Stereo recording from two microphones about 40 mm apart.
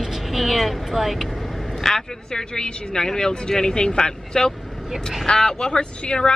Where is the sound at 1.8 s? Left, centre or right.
Centre.